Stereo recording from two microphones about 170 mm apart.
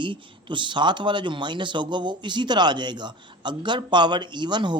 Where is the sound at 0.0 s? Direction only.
30° right (ahead or behind).